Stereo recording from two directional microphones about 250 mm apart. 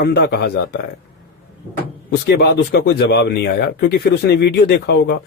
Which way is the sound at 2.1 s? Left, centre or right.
Left.